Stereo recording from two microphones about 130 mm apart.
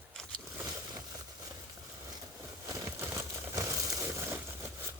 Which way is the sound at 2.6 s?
25° right (ahead or behind).